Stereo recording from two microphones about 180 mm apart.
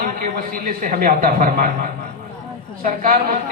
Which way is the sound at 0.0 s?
55° right (ahead or behind).